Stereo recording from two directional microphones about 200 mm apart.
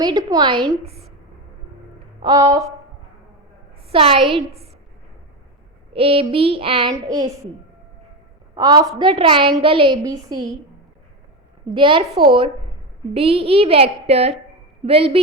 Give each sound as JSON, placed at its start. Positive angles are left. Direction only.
{"t": 0.0, "sound": "child singing", "side_deg": -20}
{"t": 2.2, "sound": "speech", "side_deg": -20}
{"t": 3.9, "sound": "child singing", "side_deg": -30}
{"t": 4.3, "sound": "a woman's voice", "side_deg": -30}
{"t": 5.9, "sound": "child singing", "side_deg": -30}
{"t": 8.5, "sound": "child singing", "side_deg": -20}
{"t": 11.7, "sound": "child singing", "side_deg": -25}
{"t": 13.1, "sound": "child singing", "side_deg": -30}